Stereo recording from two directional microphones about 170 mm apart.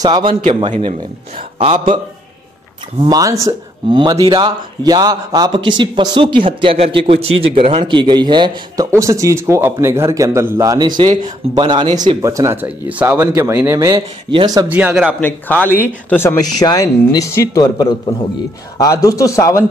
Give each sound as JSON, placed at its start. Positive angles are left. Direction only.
{"t": 0.0, "sound": "a man's voice", "side_deg": -25}
{"t": 0.3, "sound": "a man's voice", "side_deg": -50}
{"t": 0.6, "sound": "a man's voice", "side_deg": -40}
{"t": 3.1, "sound": "a man's voice", "side_deg": -20}
{"t": 14.7, "sound": "speech", "side_deg": -10}
{"t": 15.1, "sound": "a man's voice", "side_deg": 10}